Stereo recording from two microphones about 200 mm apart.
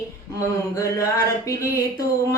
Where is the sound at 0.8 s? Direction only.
15° left (ahead or behind).